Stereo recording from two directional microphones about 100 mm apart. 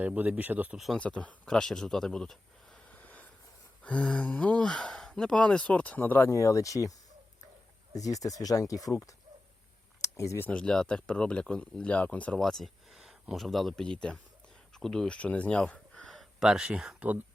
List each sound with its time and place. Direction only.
0.0 s a man's voice: 15° right (ahead or behind)
0.9 s speech: 10° left (ahead or behind)
3.0 s a sound: 15° left (ahead or behind)
3.8 s speech: 10° left (ahead or behind); by 6.9 s 35° left (ahead or behind)
7.9 s speech: 35° left (ahead or behind)
10.0 s a sound: 30° left (ahead or behind)
10.4 s speech: 10° left (ahead or behind)
12.4 s speech: 5° left (ahead or behind)
16.4 s a man's voice: 5° right (ahead or behind)